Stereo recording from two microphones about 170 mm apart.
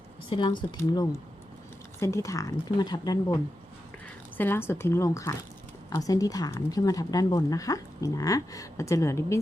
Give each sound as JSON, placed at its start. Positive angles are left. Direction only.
{"t": 0.3, "sound": "speech", "side_deg": 30}
{"t": 4.4, "sound": "speech", "side_deg": 15}